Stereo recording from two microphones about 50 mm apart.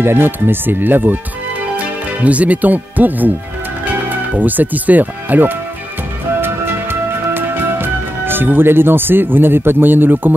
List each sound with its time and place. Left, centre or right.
0.0 s speech: right
2.2 s speech: right
6.4 s music: right